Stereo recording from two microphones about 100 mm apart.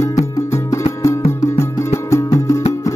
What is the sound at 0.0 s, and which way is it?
Music, 35° left (ahead or behind).